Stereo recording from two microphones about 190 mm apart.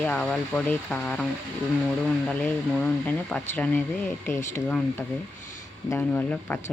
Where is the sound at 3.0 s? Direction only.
10° left (ahead or behind).